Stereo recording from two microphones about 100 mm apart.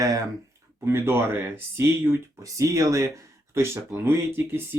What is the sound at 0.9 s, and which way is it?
Speech, 25° right (ahead or behind).